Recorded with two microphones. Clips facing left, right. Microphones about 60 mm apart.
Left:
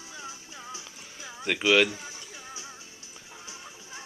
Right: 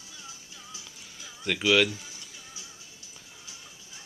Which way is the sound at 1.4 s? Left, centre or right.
Centre.